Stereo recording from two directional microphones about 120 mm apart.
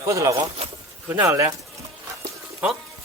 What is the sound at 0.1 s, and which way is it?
Speech, 25° right (ahead or behind).